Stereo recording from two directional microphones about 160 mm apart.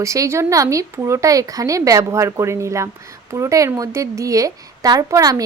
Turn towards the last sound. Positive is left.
turn(degrees=-20)  # may be behind; listen again after turning